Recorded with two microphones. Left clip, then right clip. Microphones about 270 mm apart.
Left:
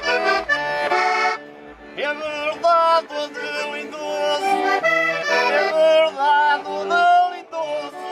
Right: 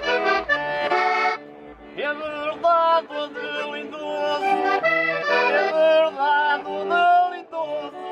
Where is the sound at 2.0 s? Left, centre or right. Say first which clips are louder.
Left 3 dB; centre.